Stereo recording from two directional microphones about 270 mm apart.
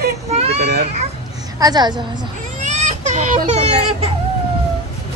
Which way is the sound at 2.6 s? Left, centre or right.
Right.